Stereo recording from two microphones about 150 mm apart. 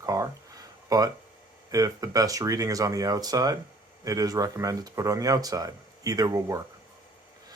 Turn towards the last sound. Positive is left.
turn(degrees=-25)  # may be behind; listen again after turning